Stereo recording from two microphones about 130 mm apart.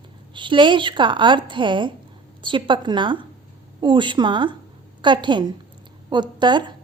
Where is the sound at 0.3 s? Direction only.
40° right (ahead or behind).